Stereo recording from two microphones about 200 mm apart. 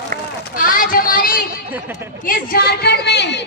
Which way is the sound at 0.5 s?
45° left (ahead or behind).